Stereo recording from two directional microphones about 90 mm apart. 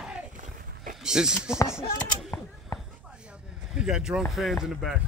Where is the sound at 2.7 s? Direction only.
40° left (ahead or behind).